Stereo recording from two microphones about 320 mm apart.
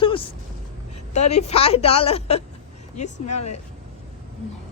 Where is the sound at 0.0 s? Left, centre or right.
Centre.